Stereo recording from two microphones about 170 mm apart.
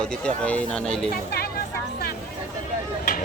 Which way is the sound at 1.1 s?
65° left (ahead or behind).